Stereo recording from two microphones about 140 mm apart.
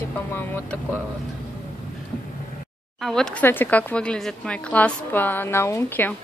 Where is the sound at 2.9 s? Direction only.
5° left (ahead or behind).